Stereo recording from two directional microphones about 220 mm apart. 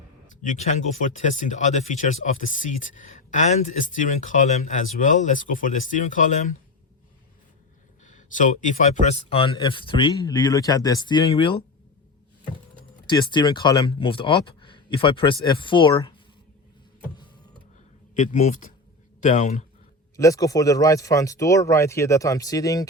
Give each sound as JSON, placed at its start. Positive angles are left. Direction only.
{"t": 0.4, "sound": "speech", "side_deg": 35}
{"t": 8.0, "sound": "speech", "side_deg": 35}
{"t": 13.1, "sound": "speech", "side_deg": 20}
{"t": 18.2, "sound": "speech", "side_deg": 35}
{"t": 20.1, "sound": "speech", "side_deg": 15}